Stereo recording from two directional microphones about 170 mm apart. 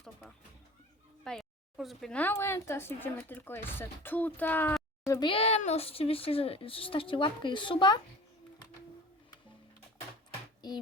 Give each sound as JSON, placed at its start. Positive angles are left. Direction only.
{"t": 0.0, "sound": "a sound", "side_deg": 5}
{"t": 1.2, "sound": "speech", "side_deg": 5}
{"t": 5.3, "sound": "a woman's voice", "side_deg": 35}